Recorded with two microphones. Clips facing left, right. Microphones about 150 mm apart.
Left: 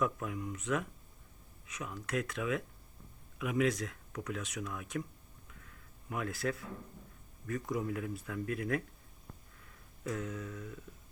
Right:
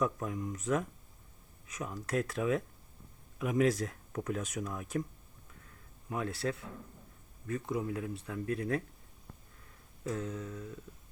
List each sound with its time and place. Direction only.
0.0 s speech: 35° right (ahead or behind)
6.1 s speech: 30° right (ahead or behind)
10.0 s speech: 30° right (ahead or behind)